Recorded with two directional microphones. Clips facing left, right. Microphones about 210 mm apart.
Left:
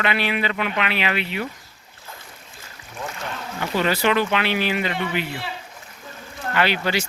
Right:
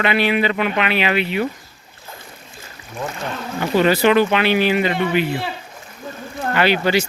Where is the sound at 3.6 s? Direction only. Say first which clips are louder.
Right 6 dB; 30° right (ahead or behind).